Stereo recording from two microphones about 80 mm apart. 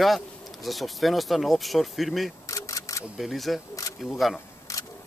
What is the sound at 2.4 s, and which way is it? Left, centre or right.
Camera, left.